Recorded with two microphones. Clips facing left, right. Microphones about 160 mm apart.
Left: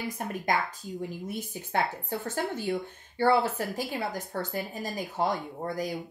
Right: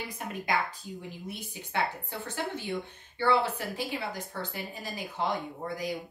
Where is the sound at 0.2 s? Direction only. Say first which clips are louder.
Left 1 dB; 45° left (ahead or behind).